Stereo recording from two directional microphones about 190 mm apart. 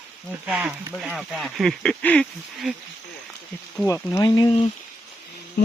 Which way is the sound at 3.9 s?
15° left (ahead or behind).